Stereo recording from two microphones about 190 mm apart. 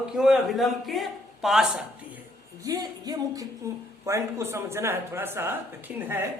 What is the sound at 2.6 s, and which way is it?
Speech, 20° right (ahead or behind).